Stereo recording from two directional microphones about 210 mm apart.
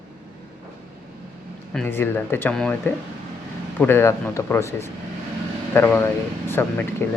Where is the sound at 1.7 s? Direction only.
5° left (ahead or behind).